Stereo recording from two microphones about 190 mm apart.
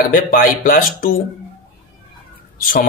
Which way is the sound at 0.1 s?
50° left (ahead or behind).